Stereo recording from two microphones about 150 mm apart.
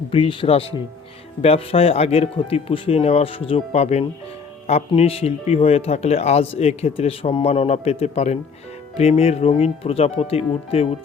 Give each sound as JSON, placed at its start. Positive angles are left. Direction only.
{"t": 0.1, "sound": "speech", "side_deg": 35}